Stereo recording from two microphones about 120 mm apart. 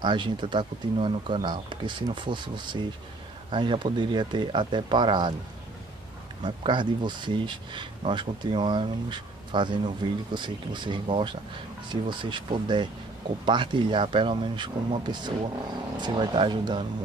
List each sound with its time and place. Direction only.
0.0 s speech: 40° right (ahead or behind)
6.4 s speech: 40° right (ahead or behind)